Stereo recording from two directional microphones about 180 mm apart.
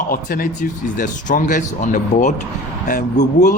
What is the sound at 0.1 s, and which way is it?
Speech, 55° left (ahead or behind).